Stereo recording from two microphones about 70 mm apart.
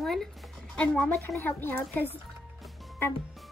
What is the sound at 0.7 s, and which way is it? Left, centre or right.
Speech, centre.